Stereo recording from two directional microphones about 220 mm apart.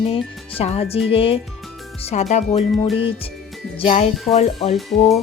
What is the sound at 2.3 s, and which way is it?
Music, 30° left (ahead or behind).